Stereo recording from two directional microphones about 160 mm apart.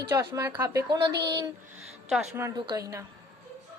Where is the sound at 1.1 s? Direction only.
90° right.